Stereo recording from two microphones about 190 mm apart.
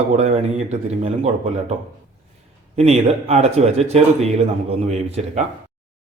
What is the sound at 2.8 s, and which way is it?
A man's voice, 35° right (ahead or behind).